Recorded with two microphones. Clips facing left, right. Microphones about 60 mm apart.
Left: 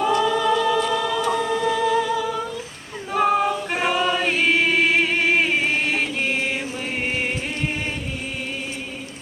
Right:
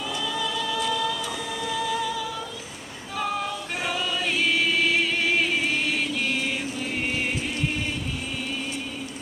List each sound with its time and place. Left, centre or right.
0.0 s a capella: left
0.9 s humming: left
3.2 s choir: left
6.9 s a sound: left